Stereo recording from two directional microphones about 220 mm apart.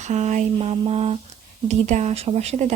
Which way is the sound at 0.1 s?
35° right (ahead or behind).